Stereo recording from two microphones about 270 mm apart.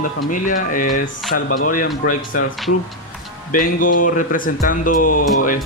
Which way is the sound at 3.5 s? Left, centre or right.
Left.